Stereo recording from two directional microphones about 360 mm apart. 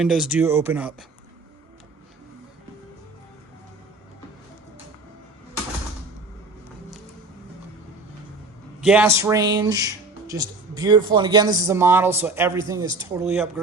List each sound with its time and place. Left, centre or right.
0.0 s speech: centre
8.8 s speech: centre